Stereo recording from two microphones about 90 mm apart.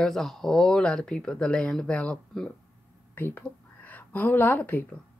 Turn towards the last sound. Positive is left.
turn(degrees=20)  # may be behind; listen again after turning